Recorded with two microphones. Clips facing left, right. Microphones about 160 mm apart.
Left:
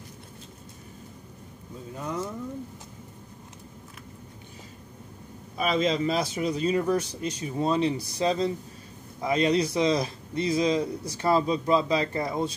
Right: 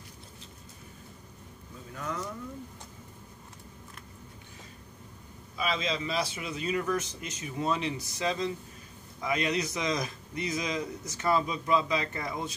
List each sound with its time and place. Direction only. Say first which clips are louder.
2.0 s speech: left 4 dB; 25° left (ahead or behind)
5.6 s speech: left 7 dB; 50° left (ahead or behind)